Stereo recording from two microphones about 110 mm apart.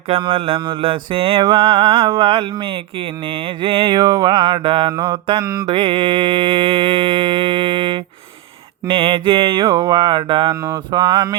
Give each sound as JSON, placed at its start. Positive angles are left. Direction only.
{"t": 0.1, "sound": "mantra", "side_deg": -55}
{"t": 3.6, "sound": "mantra", "side_deg": -55}
{"t": 3.9, "sound": "mantra", "side_deg": -35}
{"t": 5.6, "sound": "mantra", "side_deg": -55}
{"t": 9.6, "sound": "mantra", "side_deg": -35}
{"t": 10.5, "sound": "mantra", "side_deg": -30}
{"t": 11.0, "sound": "mantra", "side_deg": -40}